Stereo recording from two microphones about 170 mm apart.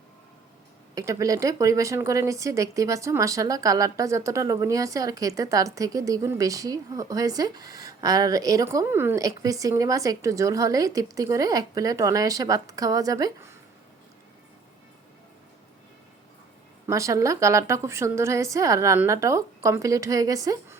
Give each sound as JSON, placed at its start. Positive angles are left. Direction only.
{"t": 0.9, "sound": "speech", "side_deg": -20}
{"t": 16.8, "sound": "speech", "side_deg": -20}